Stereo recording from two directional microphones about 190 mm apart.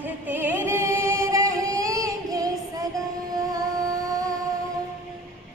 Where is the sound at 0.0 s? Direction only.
10° right (ahead or behind).